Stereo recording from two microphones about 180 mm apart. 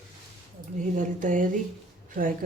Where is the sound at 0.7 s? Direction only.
45° right (ahead or behind).